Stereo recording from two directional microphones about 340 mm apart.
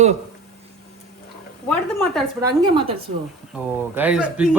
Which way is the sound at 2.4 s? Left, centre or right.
Centre.